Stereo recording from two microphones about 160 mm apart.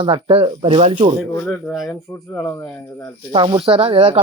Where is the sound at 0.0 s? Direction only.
35° right (ahead or behind).